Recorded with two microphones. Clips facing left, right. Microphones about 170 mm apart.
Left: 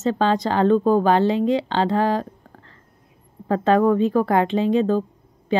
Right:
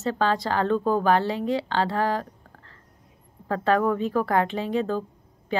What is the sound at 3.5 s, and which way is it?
A woman's voice, 20° left (ahead or behind).